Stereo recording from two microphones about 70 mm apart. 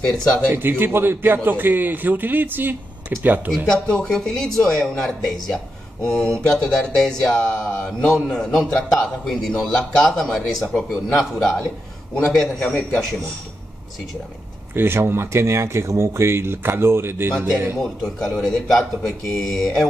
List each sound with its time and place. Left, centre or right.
0.5 s a man's voice: right
3.6 s a man's voice: centre
14.7 s speech: right
18.0 s speech: centre